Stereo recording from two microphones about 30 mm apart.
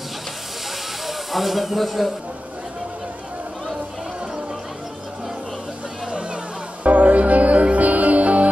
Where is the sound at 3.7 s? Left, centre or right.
Right.